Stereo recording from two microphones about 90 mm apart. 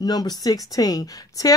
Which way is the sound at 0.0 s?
50° left (ahead or behind).